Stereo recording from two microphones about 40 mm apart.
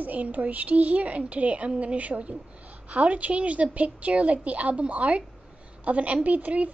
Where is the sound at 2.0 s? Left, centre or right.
Right.